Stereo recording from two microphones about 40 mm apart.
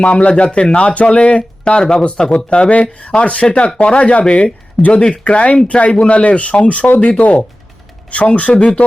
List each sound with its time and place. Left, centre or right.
0.0 s speech: left